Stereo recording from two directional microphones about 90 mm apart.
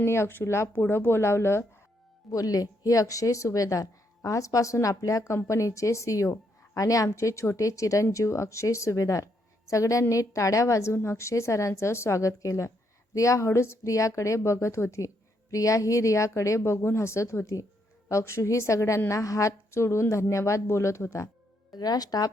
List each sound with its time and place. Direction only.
0.0 s speech: 30° left (ahead or behind)
2.3 s speech: 40° left (ahead or behind)
21.7 s speech: 45° left (ahead or behind)